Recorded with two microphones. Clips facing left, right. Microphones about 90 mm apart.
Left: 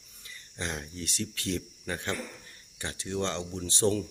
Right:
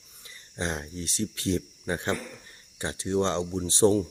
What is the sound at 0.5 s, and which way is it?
Speech, 30° right (ahead or behind).